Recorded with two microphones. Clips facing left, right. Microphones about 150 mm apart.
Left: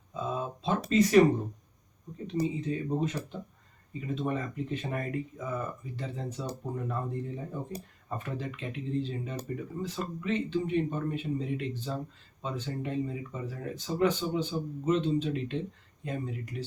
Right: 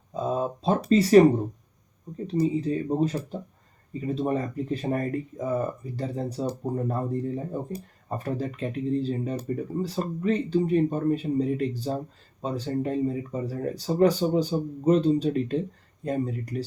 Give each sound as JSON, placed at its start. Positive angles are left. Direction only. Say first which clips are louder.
{"t": 0.1, "sound": "a sound", "louder": "right 7 dB", "side_deg": -40}
{"t": 0.9, "sound": "speech", "louder": "right 5 dB", "side_deg": -35}
{"t": 2.2, "sound": "speech", "louder": "right 6 dB", "side_deg": -35}